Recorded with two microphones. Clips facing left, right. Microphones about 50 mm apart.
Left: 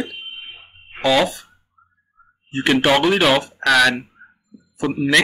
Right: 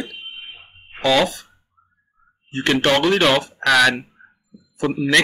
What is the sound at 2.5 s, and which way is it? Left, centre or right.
A man's voice, centre.